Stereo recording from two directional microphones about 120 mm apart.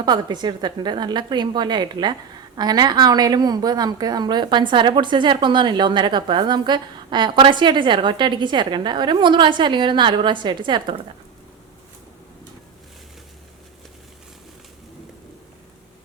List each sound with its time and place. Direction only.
0.0 s speech: 35° right (ahead or behind)